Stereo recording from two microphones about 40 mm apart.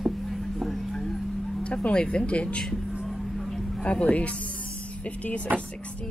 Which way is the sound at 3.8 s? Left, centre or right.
Left.